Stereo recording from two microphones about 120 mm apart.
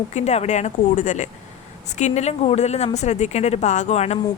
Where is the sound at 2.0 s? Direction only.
70° left (ahead or behind).